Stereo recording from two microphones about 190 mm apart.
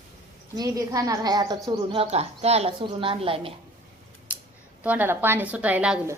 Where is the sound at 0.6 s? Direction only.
20° right (ahead or behind).